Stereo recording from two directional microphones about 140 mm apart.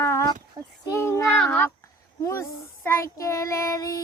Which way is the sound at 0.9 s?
20° left (ahead or behind).